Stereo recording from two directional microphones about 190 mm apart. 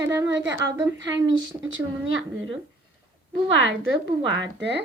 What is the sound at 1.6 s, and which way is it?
Speech, 90° right.